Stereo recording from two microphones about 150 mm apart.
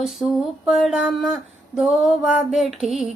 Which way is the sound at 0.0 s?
5° right (ahead or behind).